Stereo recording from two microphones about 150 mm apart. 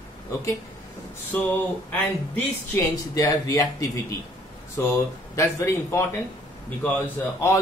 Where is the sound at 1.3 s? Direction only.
10° left (ahead or behind).